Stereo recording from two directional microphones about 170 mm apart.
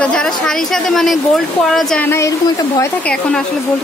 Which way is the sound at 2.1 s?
15° left (ahead or behind).